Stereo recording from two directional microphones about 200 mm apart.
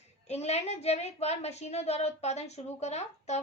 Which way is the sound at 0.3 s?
30° left (ahead or behind).